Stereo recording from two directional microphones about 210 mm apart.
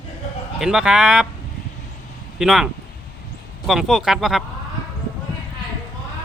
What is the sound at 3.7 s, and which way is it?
Speech, centre (ahead or behind).